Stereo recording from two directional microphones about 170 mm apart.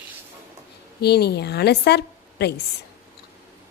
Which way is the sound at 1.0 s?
70° left (ahead or behind).